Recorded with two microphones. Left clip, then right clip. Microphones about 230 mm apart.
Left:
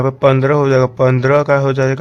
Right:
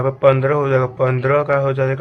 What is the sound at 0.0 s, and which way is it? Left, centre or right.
A man's voice, left.